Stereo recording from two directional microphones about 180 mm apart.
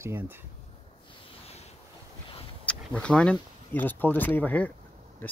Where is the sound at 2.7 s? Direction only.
5° left (ahead or behind).